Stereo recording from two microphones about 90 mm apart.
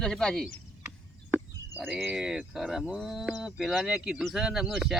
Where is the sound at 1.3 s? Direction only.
20° right (ahead or behind).